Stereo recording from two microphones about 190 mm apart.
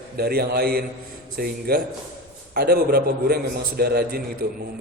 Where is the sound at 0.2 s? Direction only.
55° right (ahead or behind).